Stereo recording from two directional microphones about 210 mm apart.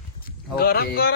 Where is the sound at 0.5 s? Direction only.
45° left (ahead or behind).